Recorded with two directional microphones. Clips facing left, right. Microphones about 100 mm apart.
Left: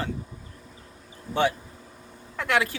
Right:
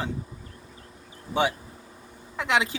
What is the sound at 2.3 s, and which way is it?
Speech, 20° right (ahead or behind).